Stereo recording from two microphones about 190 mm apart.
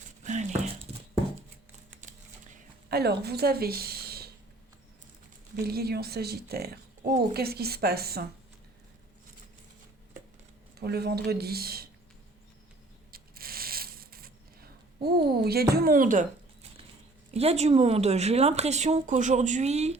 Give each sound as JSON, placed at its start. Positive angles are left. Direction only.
{"t": 0.2, "sound": "a sound", "side_deg": -40}
{"t": 2.9, "sound": "speech", "side_deg": -55}
{"t": 5.6, "sound": "speech", "side_deg": -55}
{"t": 10.8, "sound": "speech", "side_deg": -55}
{"t": 13.1, "sound": "a sound", "side_deg": -50}
{"t": 15.7, "sound": "a woman's voice", "side_deg": -50}
{"t": 17.3, "sound": "speech", "side_deg": -35}